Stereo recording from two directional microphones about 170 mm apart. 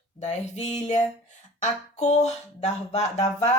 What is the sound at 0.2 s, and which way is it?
A woman's voice, 40° left (ahead or behind).